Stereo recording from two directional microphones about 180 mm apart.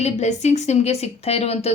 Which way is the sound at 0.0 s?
40° left (ahead or behind).